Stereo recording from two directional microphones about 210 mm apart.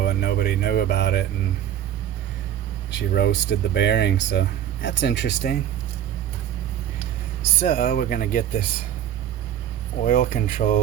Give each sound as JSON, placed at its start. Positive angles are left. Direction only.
{"t": 0.0, "sound": "a sound", "side_deg": 50}
{"t": 2.9, "sound": "speech", "side_deg": 50}
{"t": 7.6, "sound": "speech", "side_deg": 45}
{"t": 10.0, "sound": "speech", "side_deg": 40}